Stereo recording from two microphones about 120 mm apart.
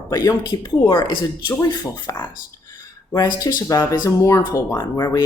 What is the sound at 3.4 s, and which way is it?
Speech, 40° left (ahead or behind).